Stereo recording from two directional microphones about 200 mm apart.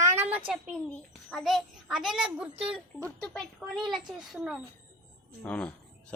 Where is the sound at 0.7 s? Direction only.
5° left (ahead or behind).